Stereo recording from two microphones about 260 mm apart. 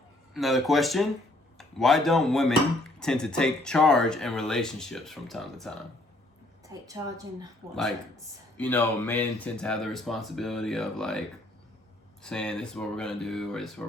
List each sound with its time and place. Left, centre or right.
0.3 s speech: centre
6.7 s a woman's voice: centre
8.5 s speech: centre
12.2 s speech: centre